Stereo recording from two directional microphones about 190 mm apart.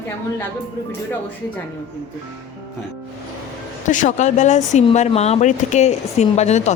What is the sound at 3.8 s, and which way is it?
Speech, 40° left (ahead or behind).